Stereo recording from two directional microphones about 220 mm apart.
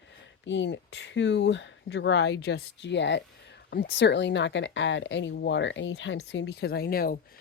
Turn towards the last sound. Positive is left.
turn(degrees=40)  # may be behind; listen again after turning